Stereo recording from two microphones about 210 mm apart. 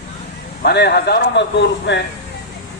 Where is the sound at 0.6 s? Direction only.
50° left (ahead or behind).